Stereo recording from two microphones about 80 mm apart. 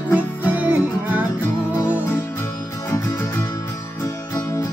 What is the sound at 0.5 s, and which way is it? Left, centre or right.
Music, centre.